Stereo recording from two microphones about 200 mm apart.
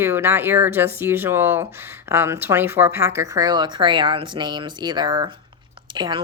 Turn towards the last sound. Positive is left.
turn(degrees=-20)  # may be behind; listen again after turning